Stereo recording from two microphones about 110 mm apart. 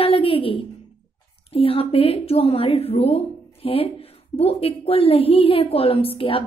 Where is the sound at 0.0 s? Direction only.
60° left (ahead or behind).